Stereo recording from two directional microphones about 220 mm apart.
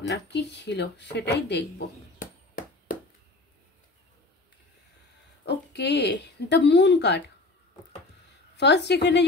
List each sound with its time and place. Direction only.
0.1 s speech: 50° left (ahead or behind)
2.1 s chop: 40° left (ahead or behind)
5.4 s speech: 50° left (ahead or behind)
8.5 s speech: 50° left (ahead or behind)